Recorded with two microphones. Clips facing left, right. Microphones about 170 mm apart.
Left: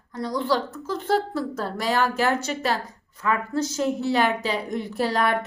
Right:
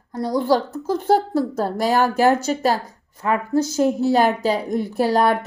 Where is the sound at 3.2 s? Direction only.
30° right (ahead or behind).